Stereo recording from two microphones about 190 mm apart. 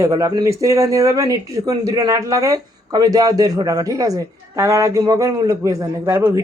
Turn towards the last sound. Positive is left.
turn(degrees=-15)  # may be behind; listen again after turning